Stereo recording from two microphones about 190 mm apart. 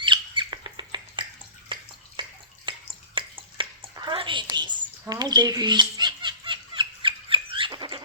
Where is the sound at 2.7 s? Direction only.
25° right (ahead or behind).